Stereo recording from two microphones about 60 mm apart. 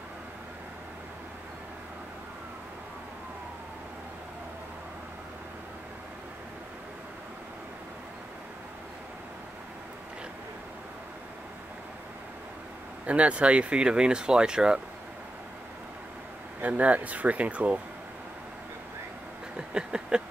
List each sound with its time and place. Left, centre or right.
13.0 s speech: right
16.6 s speech: right
19.5 s a sound: centre